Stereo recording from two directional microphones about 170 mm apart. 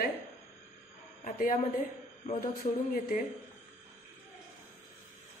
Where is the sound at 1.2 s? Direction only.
50° left (ahead or behind).